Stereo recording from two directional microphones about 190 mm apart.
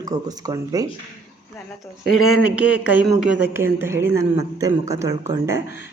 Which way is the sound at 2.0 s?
90° left.